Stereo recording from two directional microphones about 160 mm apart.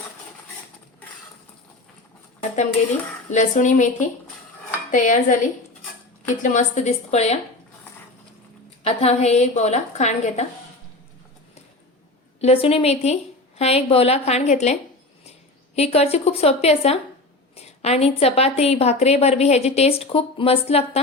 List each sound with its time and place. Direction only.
3.2 s a woman's voice: 50° left (ahead or behind)
4.9 s a woman's voice: 50° left (ahead or behind)
8.8 s a woman's voice: 40° left (ahead or behind)
12.4 s a woman's voice: 40° left (ahead or behind)